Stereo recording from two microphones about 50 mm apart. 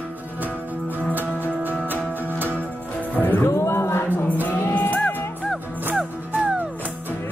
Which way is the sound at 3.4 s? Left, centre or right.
Left.